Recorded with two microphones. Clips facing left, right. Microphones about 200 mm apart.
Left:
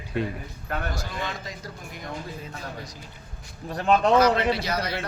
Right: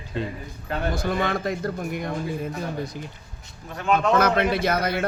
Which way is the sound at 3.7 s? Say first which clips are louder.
Left 1 dB; 35° left (ahead or behind).